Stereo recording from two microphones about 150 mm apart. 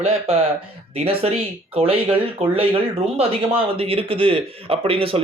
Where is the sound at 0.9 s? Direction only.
40° right (ahead or behind).